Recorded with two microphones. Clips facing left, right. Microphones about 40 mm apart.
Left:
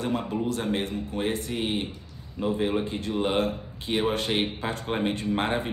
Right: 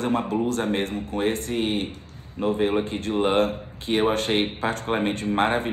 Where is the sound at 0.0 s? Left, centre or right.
Right.